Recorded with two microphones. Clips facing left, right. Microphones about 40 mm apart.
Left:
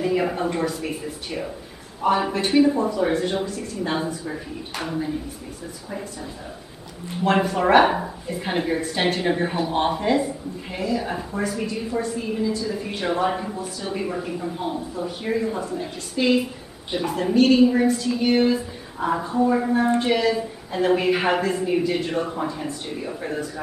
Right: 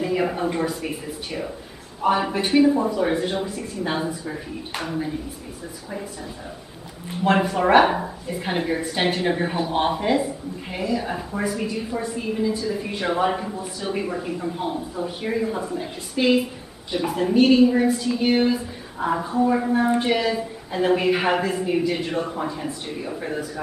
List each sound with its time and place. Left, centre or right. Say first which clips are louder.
0.0 s a woman's voice: even; centre
3.4 s a woman's voice: even; centre
4.2 s a woman's voice: even; centre
7.1 s a woman's voice: even; centre
13.6 s a woman's voice: right 1 dB; centre
14.0 s a woman's voice: even; centre